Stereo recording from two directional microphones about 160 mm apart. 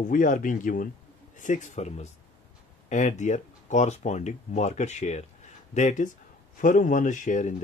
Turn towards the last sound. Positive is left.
turn(degrees=50)  # may be behind; listen again after turning